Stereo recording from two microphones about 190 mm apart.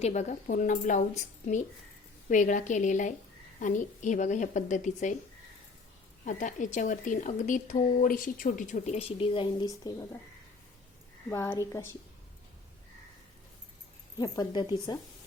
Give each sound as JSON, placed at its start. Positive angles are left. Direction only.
{"t": 0.0, "sound": "speech", "side_deg": 40}
{"t": 6.2, "sound": "speech", "side_deg": 40}
{"t": 11.3, "sound": "a woman's voice", "side_deg": 15}
{"t": 14.2, "sound": "speech", "side_deg": 20}